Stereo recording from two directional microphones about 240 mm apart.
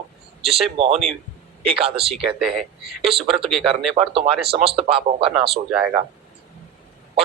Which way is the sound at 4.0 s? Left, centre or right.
Right.